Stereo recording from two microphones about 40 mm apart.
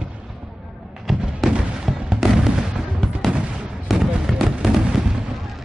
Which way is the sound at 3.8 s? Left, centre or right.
Centre.